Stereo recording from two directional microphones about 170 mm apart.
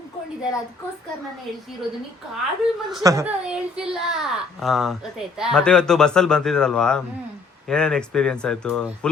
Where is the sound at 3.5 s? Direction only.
5° right (ahead or behind).